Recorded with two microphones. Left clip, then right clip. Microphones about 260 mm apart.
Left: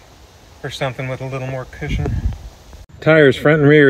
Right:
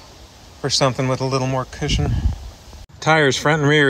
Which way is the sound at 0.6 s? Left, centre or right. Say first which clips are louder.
Right 5 dB; right.